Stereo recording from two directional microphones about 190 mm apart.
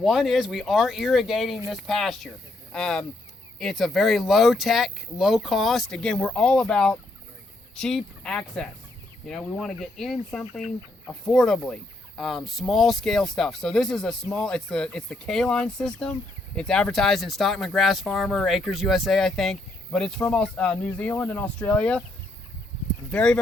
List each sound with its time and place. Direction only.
0.0 s speech: centre (ahead or behind)
23.1 s speech: 5° left (ahead or behind)